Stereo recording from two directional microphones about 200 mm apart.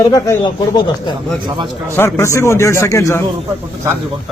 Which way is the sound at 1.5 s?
25° right (ahead or behind).